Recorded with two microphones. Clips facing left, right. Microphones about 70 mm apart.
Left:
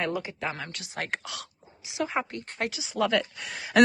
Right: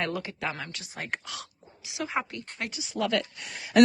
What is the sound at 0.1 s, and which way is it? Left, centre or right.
Speech, centre.